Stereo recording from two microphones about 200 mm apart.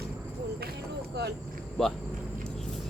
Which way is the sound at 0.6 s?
55° right (ahead or behind).